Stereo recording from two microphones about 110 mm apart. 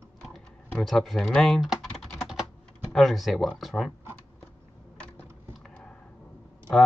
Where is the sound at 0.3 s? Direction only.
5° left (ahead or behind).